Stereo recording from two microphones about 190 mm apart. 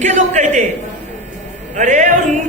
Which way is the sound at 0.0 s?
40° right (ahead or behind).